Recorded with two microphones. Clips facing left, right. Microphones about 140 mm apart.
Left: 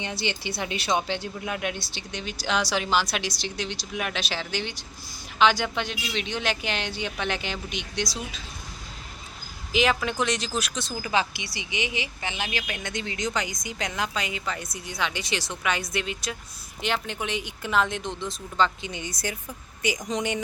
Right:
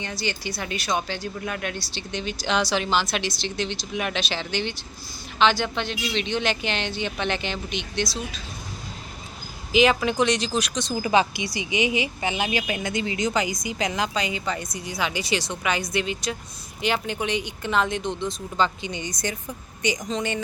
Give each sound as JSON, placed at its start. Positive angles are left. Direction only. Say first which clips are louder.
{"t": 0.0, "sound": "speech", "louder": "right 1 dB", "side_deg": 25}
{"t": 9.7, "sound": "speech", "louder": "right 5 dB", "side_deg": 0}
{"t": 10.9, "sound": "speech", "louder": "right 6 dB", "side_deg": -20}
{"t": 20.1, "sound": "speech", "louder": "right 1 dB", "side_deg": 15}